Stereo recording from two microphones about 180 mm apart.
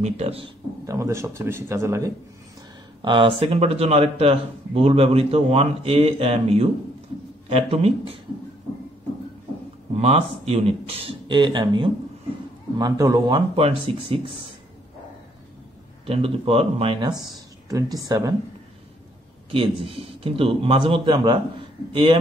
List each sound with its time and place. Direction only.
0.0 s speech: 35° right (ahead or behind)
0.8 s speech: 15° right (ahead or behind)
3.0 s speech: 25° right (ahead or behind)
9.9 s a man's voice: 35° right (ahead or behind)
16.1 s speech: 30° right (ahead or behind)
17.6 s a man's voice: 20° right (ahead or behind)
19.5 s a man's voice: 30° right (ahead or behind)